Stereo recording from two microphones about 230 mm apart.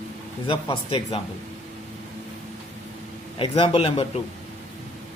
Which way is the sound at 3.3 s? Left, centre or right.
Left.